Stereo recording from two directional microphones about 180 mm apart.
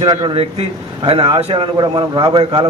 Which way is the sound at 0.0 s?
25° right (ahead or behind).